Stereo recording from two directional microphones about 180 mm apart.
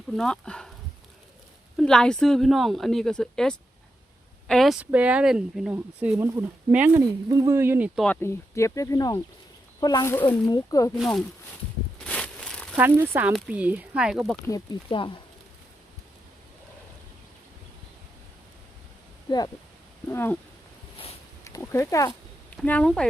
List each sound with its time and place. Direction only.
0.1 s a woman's voice: centre (ahead or behind)
1.7 s a woman's voice: 5° left (ahead or behind)
8.0 s speech: 10° left (ahead or behind)
10.9 s a woman's voice: centre (ahead or behind)
11.9 s a sound: 5° left (ahead or behind)
12.7 s a woman's voice: 10° right (ahead or behind)
14.8 s speech: 30° left (ahead or behind)
20.1 s speech: 10° left (ahead or behind)
21.4 s a sound: 15° left (ahead or behind)
22.5 s speech: 10° left (ahead or behind)